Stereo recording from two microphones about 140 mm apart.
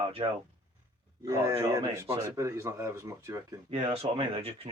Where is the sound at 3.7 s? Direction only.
40° right (ahead or behind).